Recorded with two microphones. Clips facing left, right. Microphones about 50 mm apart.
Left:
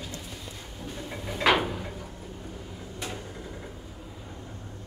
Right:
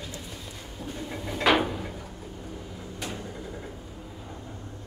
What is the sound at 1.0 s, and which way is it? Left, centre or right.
Cupboard open or close, centre.